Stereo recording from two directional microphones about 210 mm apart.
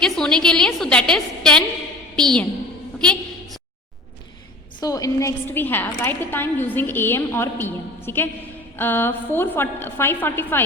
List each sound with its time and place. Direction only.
0.0 s a woman's voice: 5° left (ahead or behind)
3.0 s a sound: 5° left (ahead or behind)
4.8 s a woman's voice: 15° left (ahead or behind)